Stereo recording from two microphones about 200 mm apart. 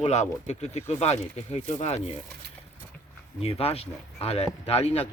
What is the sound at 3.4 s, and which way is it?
Speech, 30° left (ahead or behind).